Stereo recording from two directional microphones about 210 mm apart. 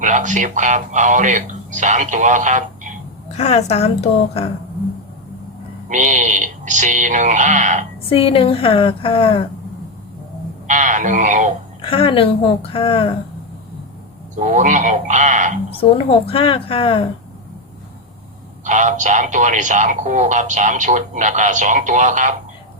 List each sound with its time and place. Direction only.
0.0 s speech: 35° right (ahead or behind)
3.3 s a woman's voice: 30° left (ahead or behind)
5.9 s speech: 35° right (ahead or behind)
8.1 s a woman's voice: 25° left (ahead or behind)
10.7 s speech: 35° right (ahead or behind)
11.8 s a woman's voice: 25° left (ahead or behind)
14.3 s speech: 35° right (ahead or behind)
15.8 s a woman's voice: 25° left (ahead or behind)
18.6 s speech: 35° right (ahead or behind)